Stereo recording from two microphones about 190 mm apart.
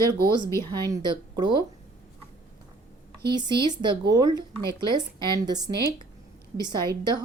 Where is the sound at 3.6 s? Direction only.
25° right (ahead or behind).